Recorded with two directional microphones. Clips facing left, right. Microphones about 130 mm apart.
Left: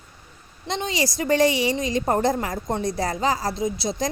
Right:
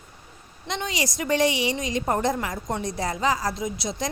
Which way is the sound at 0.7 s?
30° left (ahead or behind).